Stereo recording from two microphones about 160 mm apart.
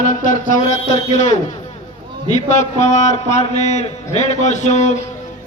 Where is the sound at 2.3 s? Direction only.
50° left (ahead or behind).